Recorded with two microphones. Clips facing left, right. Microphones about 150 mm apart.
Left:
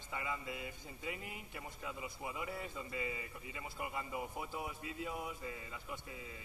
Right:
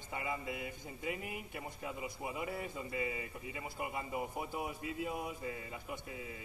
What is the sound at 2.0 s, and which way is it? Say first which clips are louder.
A man's voice: right 3 dB; 20° right (ahead or behind).